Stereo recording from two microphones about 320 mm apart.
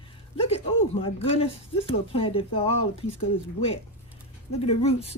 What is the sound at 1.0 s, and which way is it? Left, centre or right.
Speech, centre.